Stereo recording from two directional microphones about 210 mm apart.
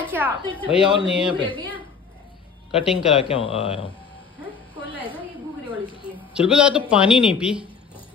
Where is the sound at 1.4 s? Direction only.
25° right (ahead or behind).